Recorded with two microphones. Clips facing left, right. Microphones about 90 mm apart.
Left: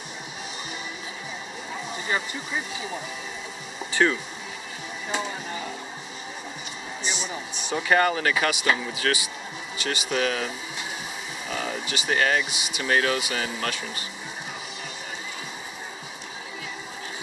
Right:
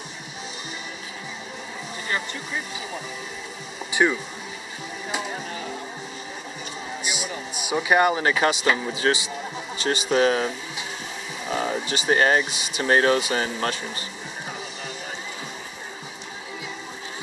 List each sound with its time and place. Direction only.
3.9 s speech: 15° right (ahead or behind)
7.1 s speech: 10° right (ahead or behind); by 10.5 s 30° right (ahead or behind)
11.5 s speech: 30° right (ahead or behind)